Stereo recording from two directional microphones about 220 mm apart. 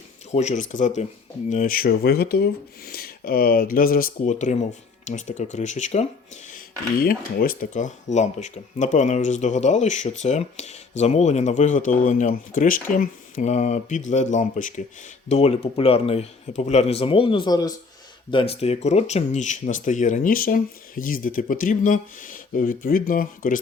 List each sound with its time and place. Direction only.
0.3 s speech: 35° left (ahead or behind)
7.0 s speech: 40° left (ahead or behind)